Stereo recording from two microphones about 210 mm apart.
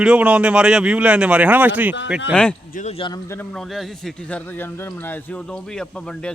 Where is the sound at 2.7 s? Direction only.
35° left (ahead or behind).